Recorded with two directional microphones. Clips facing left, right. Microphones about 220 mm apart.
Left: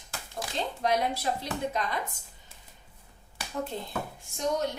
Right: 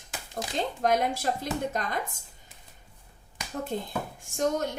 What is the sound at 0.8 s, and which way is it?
A woman's voice, 50° right (ahead or behind).